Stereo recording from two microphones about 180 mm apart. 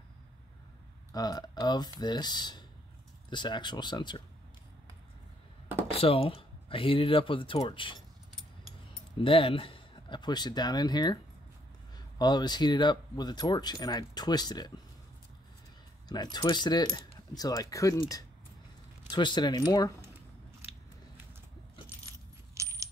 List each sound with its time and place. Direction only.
1.1 s speech: 20° left (ahead or behind)
5.9 s speech: 30° left (ahead or behind)
9.1 s speech: 30° left (ahead or behind)
12.2 s speech: 25° left (ahead or behind)
16.1 s speech: 25° left (ahead or behind)
22.5 s coin: 15° right (ahead or behind)